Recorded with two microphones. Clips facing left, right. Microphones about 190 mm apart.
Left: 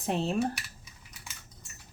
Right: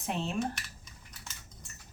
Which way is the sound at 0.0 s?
35° left (ahead or behind).